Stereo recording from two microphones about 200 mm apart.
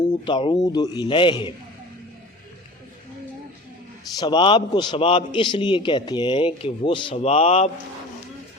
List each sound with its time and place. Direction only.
0.0 s a man's voice: 20° left (ahead or behind)
4.2 s a man's voice: 25° left (ahead or behind)